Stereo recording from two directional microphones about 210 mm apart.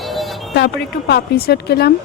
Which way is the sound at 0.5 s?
55° left (ahead or behind).